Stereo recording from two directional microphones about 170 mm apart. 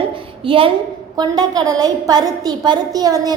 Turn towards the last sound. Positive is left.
turn(degrees=-20)  # may be behind; listen again after turning